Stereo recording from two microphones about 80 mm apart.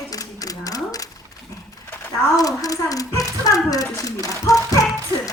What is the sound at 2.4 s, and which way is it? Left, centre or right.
Speech, left.